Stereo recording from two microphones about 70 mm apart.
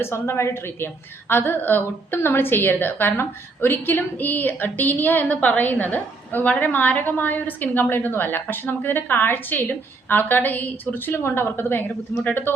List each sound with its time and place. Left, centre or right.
0.0 s a woman's voice: left
11.1 s a woman's voice: left